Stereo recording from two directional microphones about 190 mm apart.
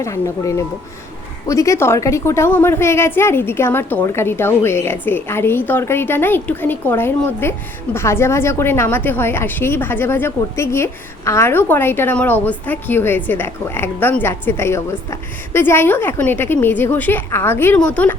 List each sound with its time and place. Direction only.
0.0 s a woman's voice: 15° left (ahead or behind)